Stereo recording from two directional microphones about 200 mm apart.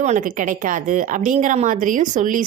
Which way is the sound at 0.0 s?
40° right (ahead or behind).